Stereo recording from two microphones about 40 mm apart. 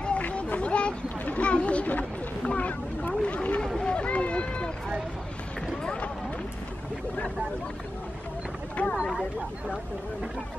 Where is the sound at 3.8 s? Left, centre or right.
Left.